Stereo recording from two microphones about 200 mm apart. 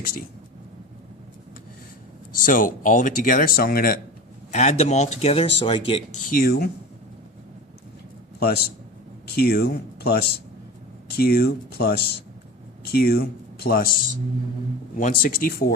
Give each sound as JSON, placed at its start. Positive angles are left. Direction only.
{"t": 2.5, "sound": "speech", "side_deg": 40}
{"t": 4.5, "sound": "speech", "side_deg": 35}
{"t": 6.3, "sound": "speech", "side_deg": 50}
{"t": 8.4, "sound": "speech", "side_deg": 50}
{"t": 14.9, "sound": "speech", "side_deg": 45}